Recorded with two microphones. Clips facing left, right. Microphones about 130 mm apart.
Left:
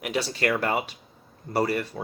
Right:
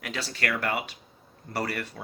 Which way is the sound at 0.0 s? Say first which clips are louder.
Left 6 dB; 15° left (ahead or behind).